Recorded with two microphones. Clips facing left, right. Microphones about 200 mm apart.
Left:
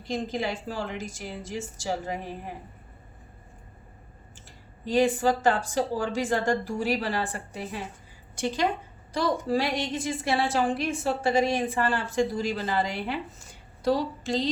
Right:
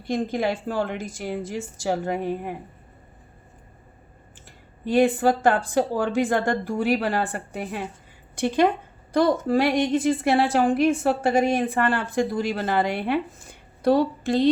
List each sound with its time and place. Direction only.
0.1 s a woman's voice: 55° right (ahead or behind)
4.9 s a woman's voice: 55° right (ahead or behind)